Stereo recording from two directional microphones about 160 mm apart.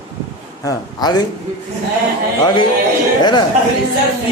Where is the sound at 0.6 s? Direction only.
25° left (ahead or behind).